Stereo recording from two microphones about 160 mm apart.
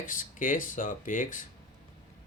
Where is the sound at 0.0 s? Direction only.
55° left (ahead or behind).